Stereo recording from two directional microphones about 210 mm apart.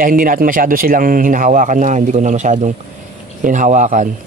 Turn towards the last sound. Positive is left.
turn(degrees=-35)  # may be behind; listen again after turning